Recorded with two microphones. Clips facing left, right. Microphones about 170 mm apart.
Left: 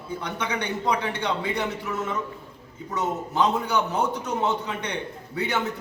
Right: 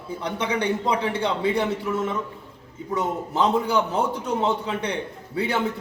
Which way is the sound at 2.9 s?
30° right (ahead or behind).